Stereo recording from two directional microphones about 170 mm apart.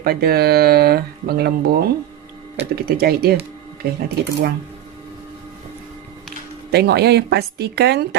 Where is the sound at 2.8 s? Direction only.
65° right (ahead or behind).